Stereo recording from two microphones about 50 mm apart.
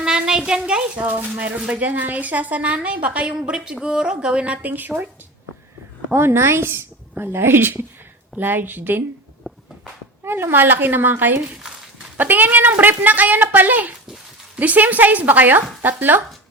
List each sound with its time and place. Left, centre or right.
0.0 s a sound: centre
1.0 s speech: right
3.3 s speech: centre; by 5.0 s right
6.1 s a woman's voice: right
10.2 s speech: right